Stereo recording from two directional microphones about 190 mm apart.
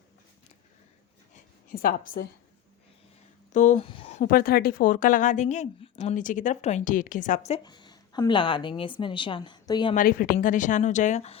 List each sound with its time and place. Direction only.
1.3 s a sound: 45° left (ahead or behind)
3.5 s a woman's voice: 40° left (ahead or behind)
3.8 s speech: 30° left (ahead or behind)
4.3 s a woman's voice: 50° left (ahead or behind)
7.6 s a woman's voice: 20° left (ahead or behind)
9.9 s a woman's voice: 50° left (ahead or behind)